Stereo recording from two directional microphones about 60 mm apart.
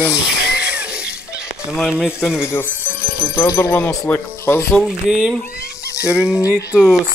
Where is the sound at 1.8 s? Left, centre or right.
Centre.